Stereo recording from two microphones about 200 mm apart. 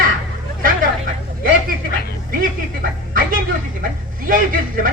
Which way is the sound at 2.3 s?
45° right (ahead or behind).